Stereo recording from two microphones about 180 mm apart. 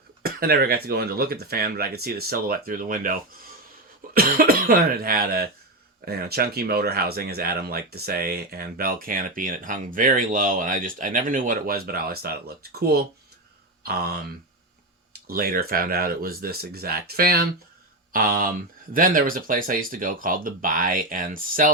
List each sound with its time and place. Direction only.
0.2 s speech: 60° right (ahead or behind)